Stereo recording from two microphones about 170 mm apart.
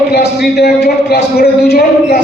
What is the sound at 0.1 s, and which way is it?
A man's voice, 75° left (ahead or behind).